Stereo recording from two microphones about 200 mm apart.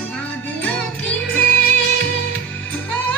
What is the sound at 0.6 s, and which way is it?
Music, 5° left (ahead or behind).